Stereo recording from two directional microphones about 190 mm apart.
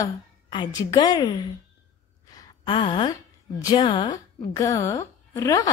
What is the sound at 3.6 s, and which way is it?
A woman's voice, 25° left (ahead or behind).